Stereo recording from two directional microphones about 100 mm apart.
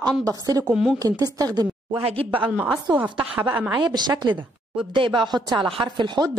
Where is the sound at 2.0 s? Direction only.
65° right (ahead or behind).